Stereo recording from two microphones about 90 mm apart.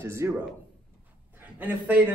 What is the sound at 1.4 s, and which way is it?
Speech, 20° right (ahead or behind).